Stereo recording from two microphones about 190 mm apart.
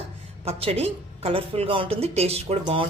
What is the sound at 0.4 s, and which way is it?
Speech, 30° right (ahead or behind).